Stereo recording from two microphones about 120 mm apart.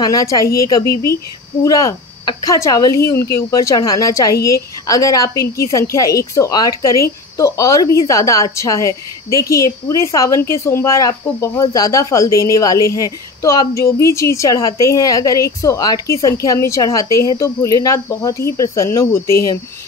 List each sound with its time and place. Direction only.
0.0 s speech: 30° left (ahead or behind)